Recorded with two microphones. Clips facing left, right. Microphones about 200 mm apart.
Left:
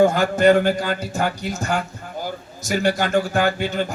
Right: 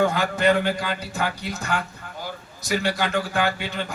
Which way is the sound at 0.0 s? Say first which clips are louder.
Left 6 dB; 45° left (ahead or behind).